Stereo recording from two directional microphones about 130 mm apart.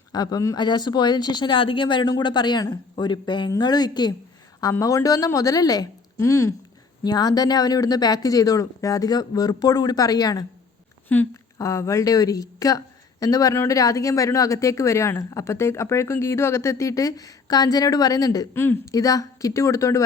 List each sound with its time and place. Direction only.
0.1 s a woman's voice: 30° left (ahead or behind)
11.1 s speech: 15° left (ahead or behind)
11.5 s a woman's voice: 25° left (ahead or behind)
18.5 s speech: 15° left (ahead or behind)
18.9 s a woman's voice: 25° left (ahead or behind)